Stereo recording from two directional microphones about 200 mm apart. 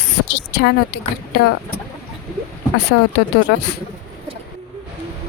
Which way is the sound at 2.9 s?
65° left (ahead or behind).